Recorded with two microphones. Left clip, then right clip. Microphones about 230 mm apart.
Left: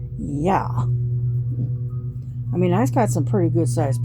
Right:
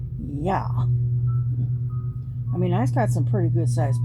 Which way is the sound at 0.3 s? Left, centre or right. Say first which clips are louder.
Left 5 dB; left.